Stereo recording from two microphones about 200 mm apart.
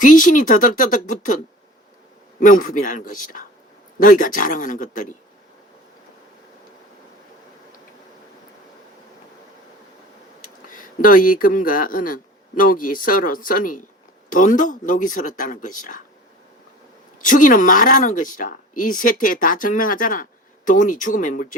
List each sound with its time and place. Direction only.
0.0 s speech: 40° left (ahead or behind)
2.4 s speech: 40° left (ahead or behind)
10.7 s speech: 40° left (ahead or behind)
17.2 s speech: 40° left (ahead or behind)